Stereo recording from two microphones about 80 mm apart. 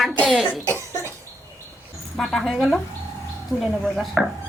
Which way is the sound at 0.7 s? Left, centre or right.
Right.